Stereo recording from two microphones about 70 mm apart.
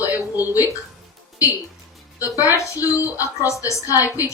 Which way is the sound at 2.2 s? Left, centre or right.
Left.